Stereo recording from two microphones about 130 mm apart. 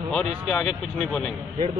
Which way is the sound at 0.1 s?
5° left (ahead or behind).